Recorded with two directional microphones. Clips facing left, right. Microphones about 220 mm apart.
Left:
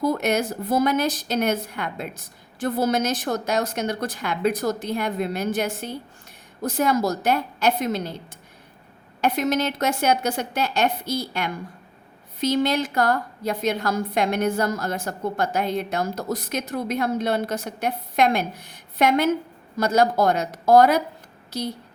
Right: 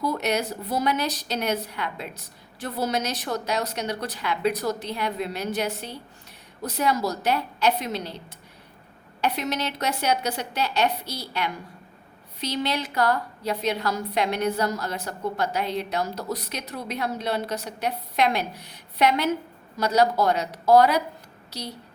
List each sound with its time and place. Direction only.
0.0 s a woman's voice: 50° left (ahead or behind)